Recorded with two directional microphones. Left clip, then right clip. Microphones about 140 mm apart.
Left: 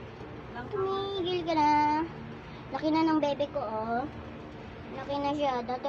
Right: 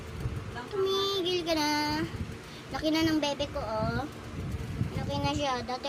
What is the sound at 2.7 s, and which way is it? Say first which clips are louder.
Speech: left 1 dB; 40° right (ahead or behind).